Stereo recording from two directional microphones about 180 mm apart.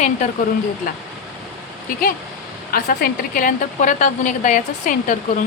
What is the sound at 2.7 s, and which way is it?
A woman's voice, 55° left (ahead or behind).